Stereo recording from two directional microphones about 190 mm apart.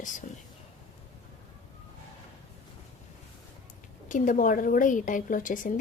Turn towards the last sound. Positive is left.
turn(degrees=45)  # may be behind; listen again after turning